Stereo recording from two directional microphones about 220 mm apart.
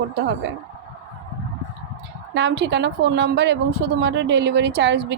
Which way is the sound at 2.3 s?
50° right (ahead or behind).